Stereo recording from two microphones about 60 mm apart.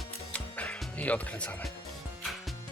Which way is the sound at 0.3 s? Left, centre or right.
Left.